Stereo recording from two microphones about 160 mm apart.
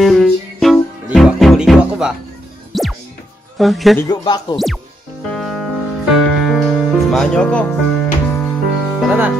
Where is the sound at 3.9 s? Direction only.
25° left (ahead or behind).